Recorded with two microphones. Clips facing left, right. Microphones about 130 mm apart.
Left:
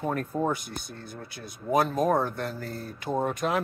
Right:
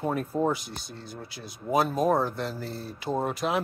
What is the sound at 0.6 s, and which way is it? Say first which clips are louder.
Speech: left 1 dB; 50° left (ahead or behind).